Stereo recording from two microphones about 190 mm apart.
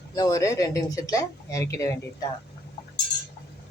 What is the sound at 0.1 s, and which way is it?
Speech, 20° left (ahead or behind).